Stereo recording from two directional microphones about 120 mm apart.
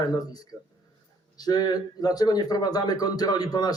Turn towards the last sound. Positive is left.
turn(degrees=30)  # may be behind; listen again after turning